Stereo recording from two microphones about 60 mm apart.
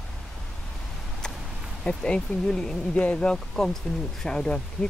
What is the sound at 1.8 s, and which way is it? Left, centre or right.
Speech, centre.